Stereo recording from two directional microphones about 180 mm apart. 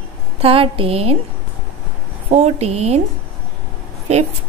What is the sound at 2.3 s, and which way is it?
Speech, 35° right (ahead or behind).